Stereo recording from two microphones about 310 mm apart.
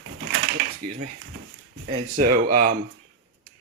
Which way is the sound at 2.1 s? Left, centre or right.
Right.